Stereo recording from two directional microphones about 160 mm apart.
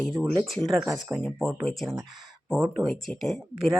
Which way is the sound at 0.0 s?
Centre (ahead or behind).